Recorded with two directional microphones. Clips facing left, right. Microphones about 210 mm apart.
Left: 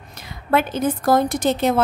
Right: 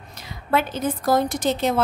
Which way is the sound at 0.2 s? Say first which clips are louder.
Left 3 dB; 55° left (ahead or behind).